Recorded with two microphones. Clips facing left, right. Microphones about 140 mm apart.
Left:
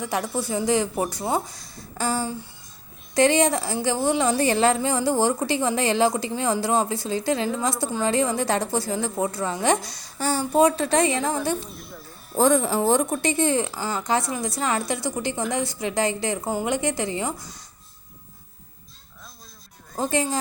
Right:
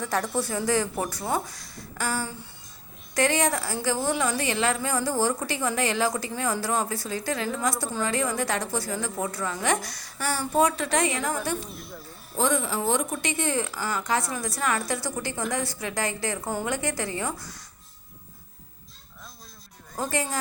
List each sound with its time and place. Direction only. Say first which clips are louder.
0.0 s a woman's voice: left 1 dB; 10° left (ahead or behind); by 11.3 s 25° left (ahead or behind)
12.4 s a woman's voice: left 6 dB; 40° left (ahead or behind); by 17.6 s 15° left (ahead or behind)
20.0 s a woman's voice: left 4 dB; 25° left (ahead or behind)